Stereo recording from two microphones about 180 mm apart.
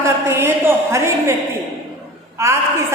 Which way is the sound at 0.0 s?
15° right (ahead or behind).